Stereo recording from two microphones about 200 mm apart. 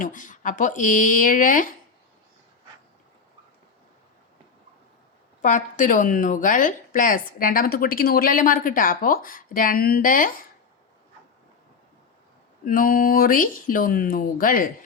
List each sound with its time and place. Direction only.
0.0 s speech: 40° left (ahead or behind)
5.4 s speech: 40° left (ahead or behind)
12.6 s speech: 45° left (ahead or behind)